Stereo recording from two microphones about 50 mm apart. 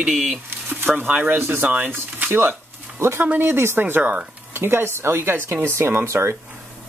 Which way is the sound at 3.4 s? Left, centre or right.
Right.